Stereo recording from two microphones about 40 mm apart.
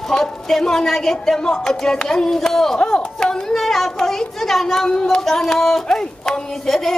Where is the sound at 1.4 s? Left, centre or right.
Centre.